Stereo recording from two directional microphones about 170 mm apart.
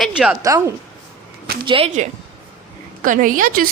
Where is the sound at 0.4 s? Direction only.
20° right (ahead or behind).